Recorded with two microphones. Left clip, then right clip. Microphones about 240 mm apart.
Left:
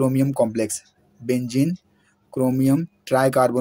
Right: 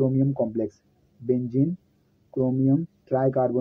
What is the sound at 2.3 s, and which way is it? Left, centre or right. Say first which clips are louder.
Speech: left 3 dB; left.